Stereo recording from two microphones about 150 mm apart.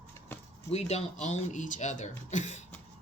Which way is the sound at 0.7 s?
45° left (ahead or behind).